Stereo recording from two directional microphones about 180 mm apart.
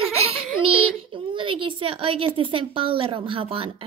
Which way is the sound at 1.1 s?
30° right (ahead or behind).